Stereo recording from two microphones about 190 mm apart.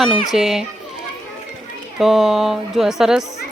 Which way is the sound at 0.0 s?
Centre (ahead or behind).